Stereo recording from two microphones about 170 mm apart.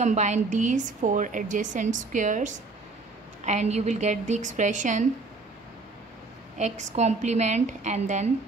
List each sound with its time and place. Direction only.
0.0 s a woman's voice: 45° right (ahead or behind)
6.6 s a woman's voice: 40° right (ahead or behind)